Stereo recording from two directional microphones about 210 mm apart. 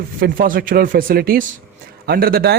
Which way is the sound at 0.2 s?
40° right (ahead or behind).